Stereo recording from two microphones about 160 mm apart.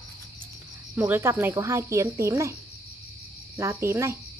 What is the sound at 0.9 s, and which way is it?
Speech, 15° right (ahead or behind).